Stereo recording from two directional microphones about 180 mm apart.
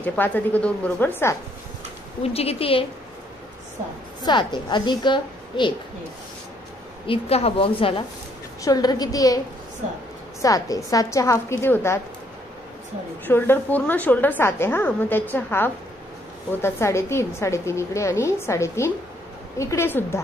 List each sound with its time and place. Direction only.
0.0 s a woman's voice: 10° left (ahead or behind)
2.2 s a woman's voice: 35° left (ahead or behind)
4.2 s a woman's voice: 25° left (ahead or behind)
7.1 s a woman's voice: 35° left (ahead or behind)
10.4 s a woman's voice: 20° left (ahead or behind)
13.2 s a woman's voice: 10° left (ahead or behind)